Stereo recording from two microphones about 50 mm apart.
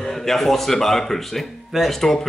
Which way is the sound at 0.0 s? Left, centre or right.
Centre.